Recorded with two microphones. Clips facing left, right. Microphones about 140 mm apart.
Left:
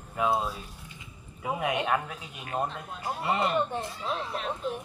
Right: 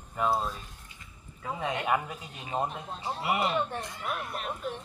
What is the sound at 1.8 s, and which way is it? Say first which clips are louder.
Speech: even; 10° right (ahead or behind).